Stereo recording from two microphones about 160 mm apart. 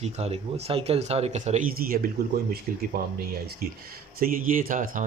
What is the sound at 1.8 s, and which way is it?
Speech, 65° right (ahead or behind).